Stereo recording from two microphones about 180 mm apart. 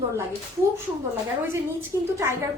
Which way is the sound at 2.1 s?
15° right (ahead or behind).